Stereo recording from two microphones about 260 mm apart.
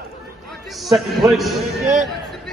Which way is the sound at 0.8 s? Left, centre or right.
Centre.